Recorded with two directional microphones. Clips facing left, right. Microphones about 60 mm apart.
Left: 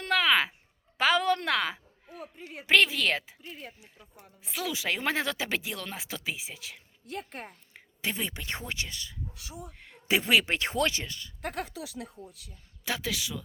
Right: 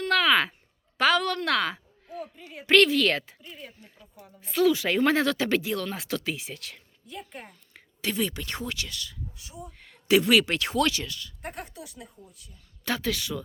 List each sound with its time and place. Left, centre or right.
0.1 s a sound: centre
0.9 s a woman's voice: centre
1.5 s a sound: centre
2.6 s a woman's voice: centre
7.1 s speech: left
7.7 s speech: left
9.3 s speech: left
9.7 s a sound: centre
10.1 s speech: left
11.4 s speech: left
12.8 s speech: centre